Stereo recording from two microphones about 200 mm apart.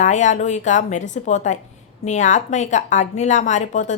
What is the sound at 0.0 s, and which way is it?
A woman's voice, 35° left (ahead or behind).